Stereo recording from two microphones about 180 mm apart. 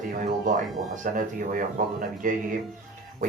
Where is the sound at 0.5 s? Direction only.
45° right (ahead or behind).